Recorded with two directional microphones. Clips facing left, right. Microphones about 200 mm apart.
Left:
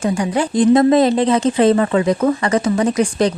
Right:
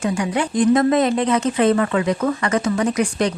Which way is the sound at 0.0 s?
35° left (ahead or behind).